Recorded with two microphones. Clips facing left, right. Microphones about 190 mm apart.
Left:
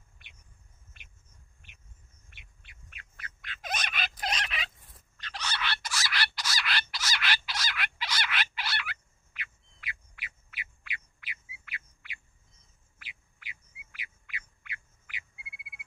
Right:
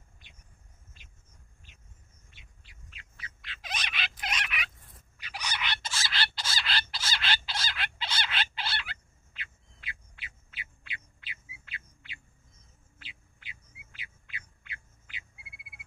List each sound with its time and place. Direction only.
1.0 s vehicle: 65° left (ahead or behind)
2.3 s bird: 60° left (ahead or behind); by 4.6 s 35° left (ahead or behind)
4.9 s fowl: 10° right (ahead or behind); by 12.2 s 25° right (ahead or behind)
13.0 s bird: 30° right (ahead or behind)